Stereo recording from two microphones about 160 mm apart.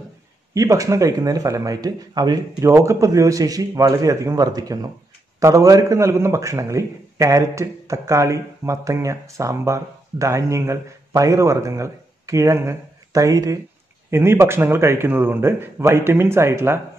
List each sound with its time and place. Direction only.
0.6 s a man's voice: 20° right (ahead or behind)